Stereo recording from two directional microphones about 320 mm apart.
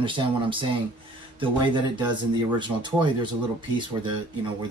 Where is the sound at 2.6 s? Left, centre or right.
Centre.